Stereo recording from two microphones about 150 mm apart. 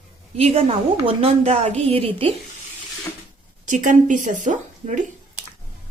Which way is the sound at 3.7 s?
60° right (ahead or behind).